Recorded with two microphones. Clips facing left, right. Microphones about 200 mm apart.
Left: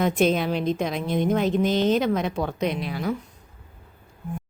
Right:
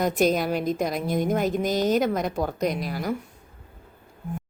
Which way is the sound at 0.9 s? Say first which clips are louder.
Left 1 dB; 45° right (ahead or behind).